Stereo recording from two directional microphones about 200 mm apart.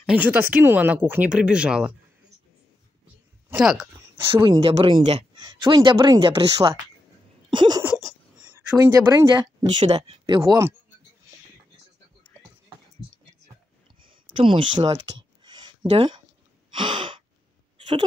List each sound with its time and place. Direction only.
0.0 s speech: 5° right (ahead or behind)
3.4 s speech: 5° right (ahead or behind)
4.4 s speech: 25° right (ahead or behind)
7.5 s a sound: 20° right (ahead or behind)
7.8 s speech: 5° right (ahead or behind); by 10.7 s 20° right (ahead or behind)
14.0 s a sound: 25° right (ahead or behind)
15.9 s speech: 25° right (ahead or behind)
16.7 s gasp: 25° right (ahead or behind)